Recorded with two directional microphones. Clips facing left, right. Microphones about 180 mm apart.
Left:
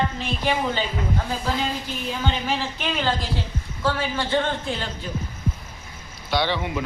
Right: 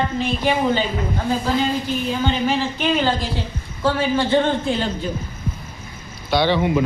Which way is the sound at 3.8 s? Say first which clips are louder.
Right 6 dB; 20° right (ahead or behind).